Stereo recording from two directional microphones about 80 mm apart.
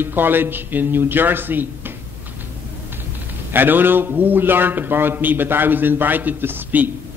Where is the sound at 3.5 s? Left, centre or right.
Right.